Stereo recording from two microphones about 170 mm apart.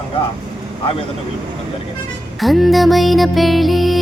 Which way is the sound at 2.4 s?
Centre (ahead or behind).